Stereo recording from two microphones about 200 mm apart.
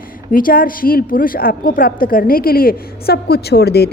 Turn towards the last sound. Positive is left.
turn(degrees=55)  # may be behind; listen again after turning